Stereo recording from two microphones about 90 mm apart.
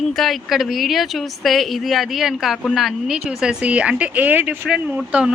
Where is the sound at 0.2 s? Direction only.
Centre (ahead or behind).